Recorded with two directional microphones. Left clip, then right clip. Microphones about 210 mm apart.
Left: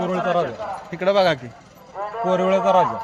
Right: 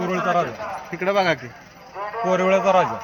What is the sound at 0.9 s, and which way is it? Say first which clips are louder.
Speech: left 2 dB; 55° left (ahead or behind).